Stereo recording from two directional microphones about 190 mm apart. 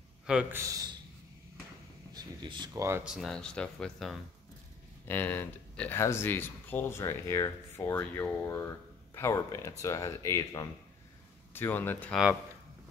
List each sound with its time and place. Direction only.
0.3 s a man's voice: 10° right (ahead or behind)
2.1 s speech: 25° right (ahead or behind)
3.1 s speech: centre (ahead or behind)